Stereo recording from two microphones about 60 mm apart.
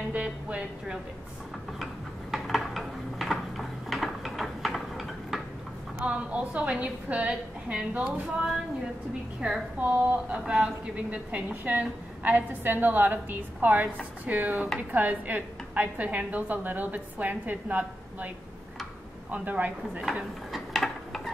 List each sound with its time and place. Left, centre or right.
0.1 s speech: right
2.3 s a sound: centre
6.0 s a woman's voice: right
9.4 s a woman's voice: centre
11.1 s a woman's voice: right
19.3 s a woman's voice: right
20.5 s a sound: centre